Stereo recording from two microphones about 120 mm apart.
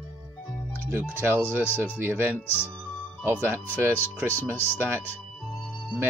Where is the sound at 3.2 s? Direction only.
20° right (ahead or behind).